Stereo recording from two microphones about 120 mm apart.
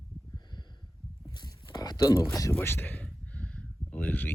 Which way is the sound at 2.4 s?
20° left (ahead or behind).